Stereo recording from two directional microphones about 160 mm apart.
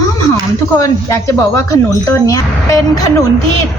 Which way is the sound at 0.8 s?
20° left (ahead or behind).